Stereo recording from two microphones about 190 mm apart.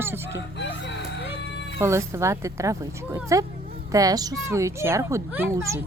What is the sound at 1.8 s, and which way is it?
Speech, 15° right (ahead or behind).